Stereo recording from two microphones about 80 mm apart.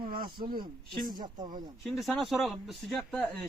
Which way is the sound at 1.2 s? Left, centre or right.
Right.